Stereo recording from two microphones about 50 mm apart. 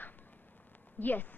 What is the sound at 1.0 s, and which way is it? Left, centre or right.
Speech, left.